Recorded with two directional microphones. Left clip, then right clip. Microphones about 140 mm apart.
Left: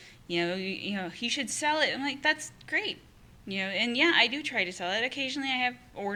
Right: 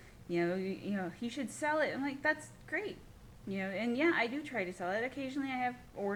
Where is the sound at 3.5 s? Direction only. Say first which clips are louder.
Left 7 dB; 10° left (ahead or behind).